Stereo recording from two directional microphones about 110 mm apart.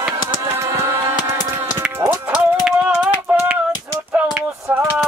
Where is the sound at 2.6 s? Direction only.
10° right (ahead or behind).